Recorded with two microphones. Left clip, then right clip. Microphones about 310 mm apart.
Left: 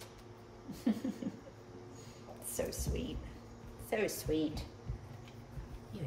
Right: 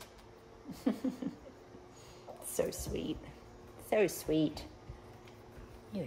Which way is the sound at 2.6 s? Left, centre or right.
Right.